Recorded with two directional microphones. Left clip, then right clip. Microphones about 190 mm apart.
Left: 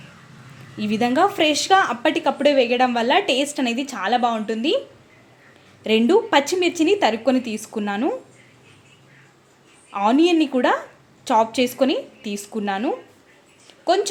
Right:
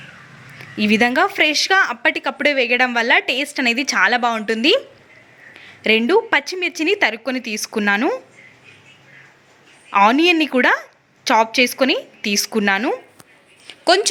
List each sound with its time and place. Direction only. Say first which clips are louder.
0.8 s speech: right 3 dB; 10° right (ahead or behind)
5.8 s speech: right 2 dB; 10° right (ahead or behind)
9.9 s speech: right 4 dB; 10° right (ahead or behind)
13.7 s a sound: right 4 dB; 15° right (ahead or behind)